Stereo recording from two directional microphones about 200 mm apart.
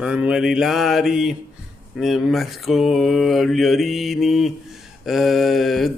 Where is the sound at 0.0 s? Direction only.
5° right (ahead or behind).